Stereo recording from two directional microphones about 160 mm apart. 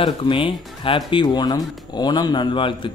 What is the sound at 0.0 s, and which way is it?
Speech, 35° left (ahead or behind).